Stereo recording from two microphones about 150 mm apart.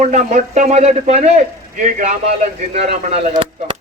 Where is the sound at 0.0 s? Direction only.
50° right (ahead or behind).